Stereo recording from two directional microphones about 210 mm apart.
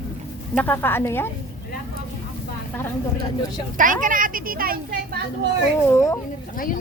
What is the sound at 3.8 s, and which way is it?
Speech, 40° right (ahead or behind).